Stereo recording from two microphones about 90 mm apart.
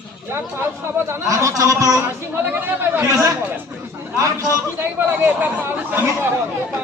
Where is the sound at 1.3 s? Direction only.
40° right (ahead or behind).